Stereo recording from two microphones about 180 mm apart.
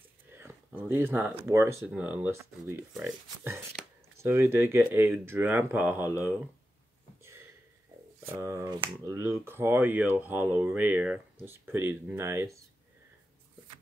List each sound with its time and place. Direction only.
0.4 s a sound: 15° right (ahead or behind)
1.4 s speech: 15° right (ahead or behind)
4.2 s speech: 15° right (ahead or behind)
8.2 s speech: 15° right (ahead or behind)